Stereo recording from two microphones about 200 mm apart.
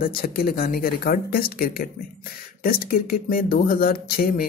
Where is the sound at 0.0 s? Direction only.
45° left (ahead or behind).